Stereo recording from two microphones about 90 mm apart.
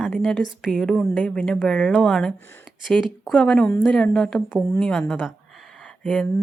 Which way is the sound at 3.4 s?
5° left (ahead or behind).